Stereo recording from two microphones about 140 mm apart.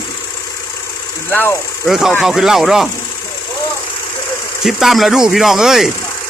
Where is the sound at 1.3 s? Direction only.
15° left (ahead or behind).